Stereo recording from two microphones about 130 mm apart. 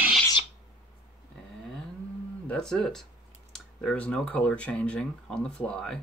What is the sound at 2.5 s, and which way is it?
Speech, 5° left (ahead or behind).